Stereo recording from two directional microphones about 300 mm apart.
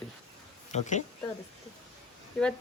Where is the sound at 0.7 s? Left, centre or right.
Left.